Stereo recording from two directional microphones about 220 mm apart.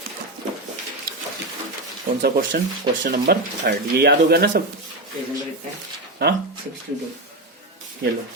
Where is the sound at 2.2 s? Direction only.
40° right (ahead or behind).